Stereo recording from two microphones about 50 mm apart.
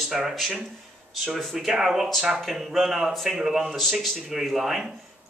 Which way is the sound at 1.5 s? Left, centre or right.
Centre.